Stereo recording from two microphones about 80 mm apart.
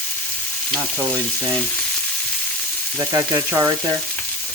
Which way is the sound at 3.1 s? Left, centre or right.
Right.